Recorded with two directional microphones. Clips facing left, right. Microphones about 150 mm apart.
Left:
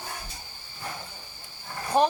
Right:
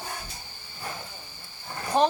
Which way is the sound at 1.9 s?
10° left (ahead or behind).